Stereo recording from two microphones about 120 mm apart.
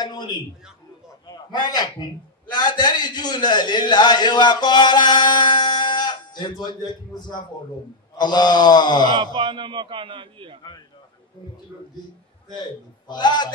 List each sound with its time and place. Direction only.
0.0 s a man's voice: 35° left (ahead or behind)
9.1 s a man's voice: 40° right (ahead or behind)
13.1 s a man's voice: 35° left (ahead or behind)